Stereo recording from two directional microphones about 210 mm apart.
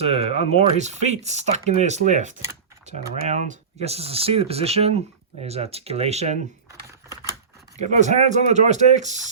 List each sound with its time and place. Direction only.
0.0 s speech: 30° right (ahead or behind)
6.7 s computer keyboard: 15° right (ahead or behind)
7.8 s speech: 35° right (ahead or behind)